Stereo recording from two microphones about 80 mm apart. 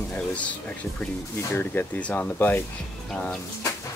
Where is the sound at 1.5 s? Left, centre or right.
Left.